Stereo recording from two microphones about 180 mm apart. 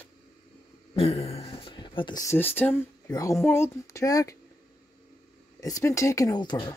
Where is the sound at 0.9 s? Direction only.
35° left (ahead or behind); by 4.4 s 20° left (ahead or behind).